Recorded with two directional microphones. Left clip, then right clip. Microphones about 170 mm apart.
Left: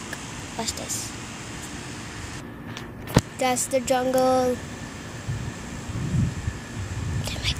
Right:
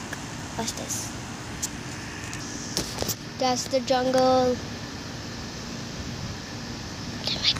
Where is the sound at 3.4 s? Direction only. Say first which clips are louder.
Right 2 dB; 15° left (ahead or behind).